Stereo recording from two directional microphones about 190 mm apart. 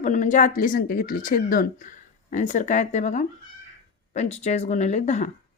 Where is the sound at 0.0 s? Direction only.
40° left (ahead or behind).